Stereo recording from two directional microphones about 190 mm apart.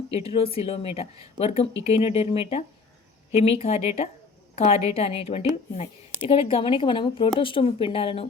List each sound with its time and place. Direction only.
0.1 s speech: 30° left (ahead or behind)